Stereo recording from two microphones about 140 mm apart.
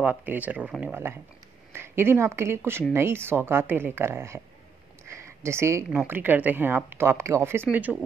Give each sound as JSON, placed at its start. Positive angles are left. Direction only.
{"t": 0.0, "sound": "speech", "side_deg": -10}
{"t": 5.0, "sound": "a sound", "side_deg": -20}
{"t": 5.9, "sound": "speech", "side_deg": -10}